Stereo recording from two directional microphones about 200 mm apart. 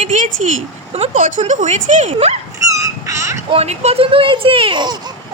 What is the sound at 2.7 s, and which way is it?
Dog, 15° right (ahead or behind).